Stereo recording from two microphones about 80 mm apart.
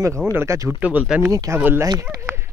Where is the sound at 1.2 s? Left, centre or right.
Right.